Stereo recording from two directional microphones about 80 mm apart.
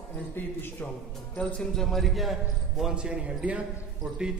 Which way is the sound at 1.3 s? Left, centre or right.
Centre.